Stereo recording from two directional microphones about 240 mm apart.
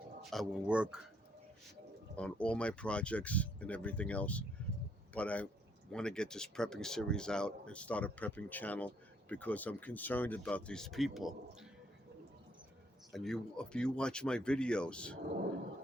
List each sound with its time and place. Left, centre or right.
0.3 s speech: centre
2.1 s speech: centre
13.1 s speech: centre